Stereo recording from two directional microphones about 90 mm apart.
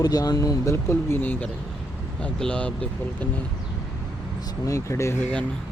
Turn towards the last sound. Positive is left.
turn(degrees=30)  # may be behind; listen again after turning